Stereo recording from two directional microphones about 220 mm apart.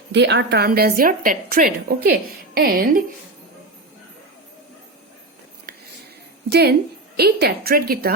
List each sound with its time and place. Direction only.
0.1 s a woman's voice: 50° right (ahead or behind)
6.5 s a woman's voice: 45° right (ahead or behind)